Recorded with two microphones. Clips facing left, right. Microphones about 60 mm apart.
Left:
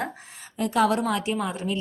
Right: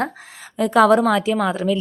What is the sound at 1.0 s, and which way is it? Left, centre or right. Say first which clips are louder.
Speech: right 8 dB; right.